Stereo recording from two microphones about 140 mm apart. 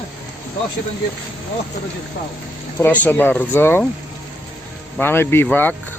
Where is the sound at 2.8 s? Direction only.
15° left (ahead or behind).